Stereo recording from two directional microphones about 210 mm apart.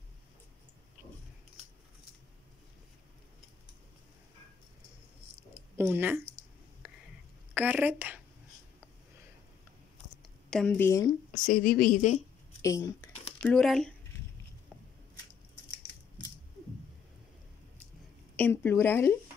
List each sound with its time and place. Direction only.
5.8 s speech: 10° right (ahead or behind)
6.8 s a sound: 10° right (ahead or behind)
7.5 s speech: 10° right (ahead or behind)
10.5 s speech: 5° left (ahead or behind)
11.3 s a woman's voice: 40° left (ahead or behind)
12.6 s speech: 15° left (ahead or behind)
13.4 s speech: 5° left (ahead or behind)
18.3 s speech: 10° left (ahead or behind)